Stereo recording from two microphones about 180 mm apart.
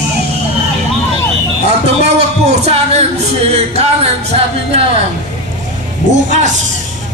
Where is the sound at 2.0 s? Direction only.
35° right (ahead or behind).